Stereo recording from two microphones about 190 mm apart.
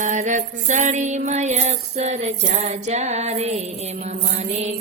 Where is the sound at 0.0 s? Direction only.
40° right (ahead or behind).